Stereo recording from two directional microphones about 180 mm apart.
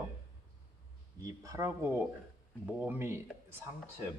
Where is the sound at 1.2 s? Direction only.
20° right (ahead or behind).